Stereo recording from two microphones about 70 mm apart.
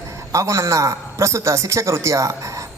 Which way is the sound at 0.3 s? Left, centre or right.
Right.